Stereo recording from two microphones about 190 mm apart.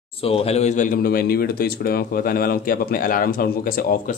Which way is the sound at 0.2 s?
30° left (ahead or behind).